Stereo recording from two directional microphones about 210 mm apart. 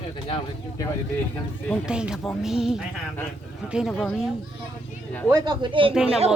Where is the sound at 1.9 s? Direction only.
5° right (ahead or behind).